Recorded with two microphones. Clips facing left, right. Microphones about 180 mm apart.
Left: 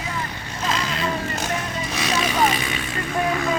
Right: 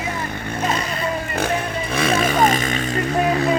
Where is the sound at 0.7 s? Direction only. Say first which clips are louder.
Right 2 dB; 90° left.